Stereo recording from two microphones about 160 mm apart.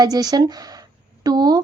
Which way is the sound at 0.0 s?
25° right (ahead or behind).